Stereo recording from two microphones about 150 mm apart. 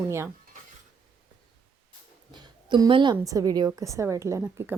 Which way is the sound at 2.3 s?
30° right (ahead or behind).